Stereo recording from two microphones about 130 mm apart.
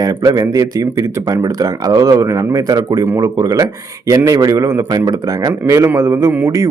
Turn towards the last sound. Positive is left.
turn(degrees=-20)  # may be behind; listen again after turning